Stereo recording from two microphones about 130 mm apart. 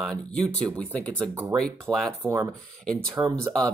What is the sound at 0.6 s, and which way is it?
Speech, 10° left (ahead or behind).